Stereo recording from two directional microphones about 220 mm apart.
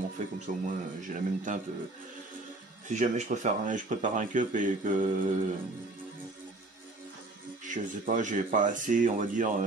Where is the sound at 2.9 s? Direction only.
35° right (ahead or behind).